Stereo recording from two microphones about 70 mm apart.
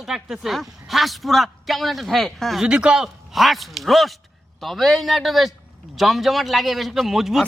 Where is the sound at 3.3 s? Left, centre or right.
Centre.